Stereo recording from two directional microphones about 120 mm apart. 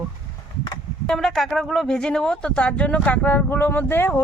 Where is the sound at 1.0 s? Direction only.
5° left (ahead or behind).